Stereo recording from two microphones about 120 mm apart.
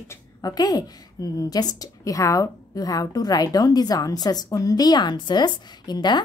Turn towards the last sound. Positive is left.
turn(degrees=35)  # may be behind; listen again after turning